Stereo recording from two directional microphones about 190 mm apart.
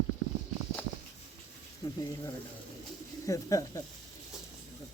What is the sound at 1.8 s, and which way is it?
Speech, 20° left (ahead or behind).